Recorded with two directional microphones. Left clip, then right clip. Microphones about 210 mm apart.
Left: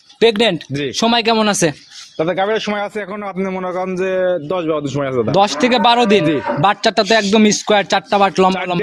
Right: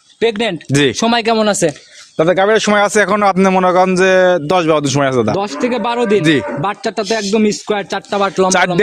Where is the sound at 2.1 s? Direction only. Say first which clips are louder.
Right 5 dB; 55° right (ahead or behind).